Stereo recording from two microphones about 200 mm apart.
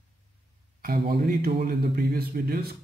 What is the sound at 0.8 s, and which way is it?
Speech, 45° right (ahead or behind).